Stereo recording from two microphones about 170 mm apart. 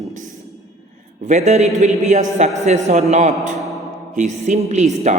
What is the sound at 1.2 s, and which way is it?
A woman's voice, 40° right (ahead or behind).